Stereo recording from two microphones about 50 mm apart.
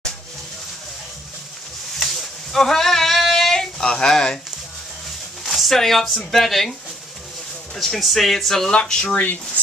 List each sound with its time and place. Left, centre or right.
2.0 s a sound: centre
5.4 s speech: centre
7.7 s speech: centre
8.6 s speech: centre
9.1 s dishes: left